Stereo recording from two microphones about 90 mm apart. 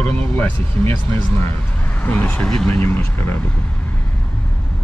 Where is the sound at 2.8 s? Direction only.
25° left (ahead or behind).